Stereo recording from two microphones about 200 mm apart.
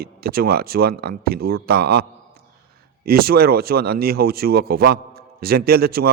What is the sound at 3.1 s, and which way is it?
A man's voice, 50° right (ahead or behind).